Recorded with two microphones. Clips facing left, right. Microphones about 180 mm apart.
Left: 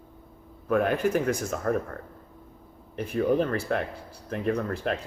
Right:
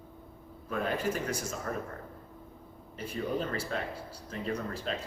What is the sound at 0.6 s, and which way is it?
Speech, 65° left (ahead or behind).